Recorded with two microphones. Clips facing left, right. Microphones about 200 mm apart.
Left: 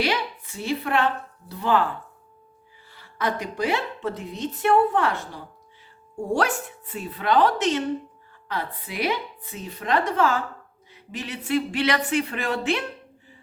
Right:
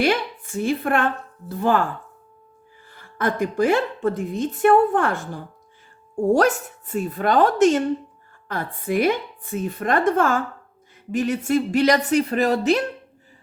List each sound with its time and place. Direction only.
0.0 s a woman's voice: 50° right (ahead or behind)
2.9 s a woman's voice: 50° right (ahead or behind)